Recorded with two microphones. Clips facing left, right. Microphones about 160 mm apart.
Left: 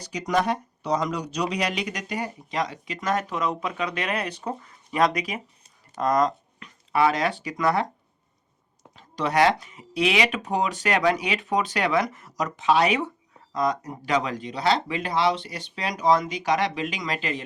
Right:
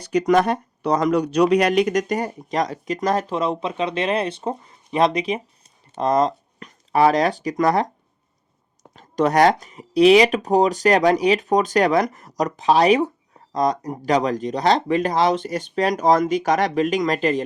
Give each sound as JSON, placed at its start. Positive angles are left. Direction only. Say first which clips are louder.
{"t": 0.0, "sound": "speech", "louder": "right 7 dB", "side_deg": -55}
{"t": 6.6, "sound": "speech", "louder": "right 5 dB", "side_deg": -40}
{"t": 9.0, "sound": "speech", "louder": "right 5 dB", "side_deg": -45}